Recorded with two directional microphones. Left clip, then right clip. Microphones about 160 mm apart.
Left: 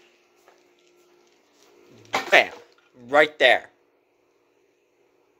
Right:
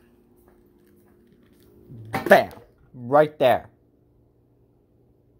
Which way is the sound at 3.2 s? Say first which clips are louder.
Left 1 dB; 5° left (ahead or behind).